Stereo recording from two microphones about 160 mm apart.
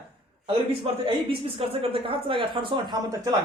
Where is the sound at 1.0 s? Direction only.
35° right (ahead or behind).